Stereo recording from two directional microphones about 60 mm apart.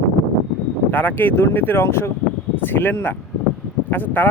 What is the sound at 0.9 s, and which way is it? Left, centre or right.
Speech, left.